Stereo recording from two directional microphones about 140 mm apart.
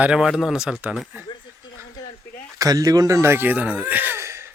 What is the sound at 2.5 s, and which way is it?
Speech, 25° right (ahead or behind).